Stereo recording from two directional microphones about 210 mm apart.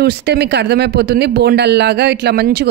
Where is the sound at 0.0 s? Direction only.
50° right (ahead or behind).